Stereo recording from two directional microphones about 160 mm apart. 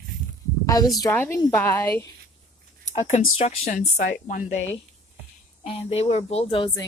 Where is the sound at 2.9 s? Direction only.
45° left (ahead or behind).